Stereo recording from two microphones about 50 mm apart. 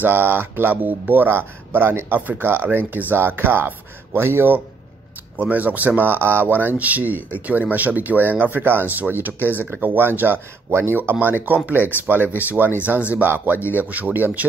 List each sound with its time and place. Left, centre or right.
0.0 s speech: right
5.4 s speech: right
10.7 s speech: right
11.0 s speech: right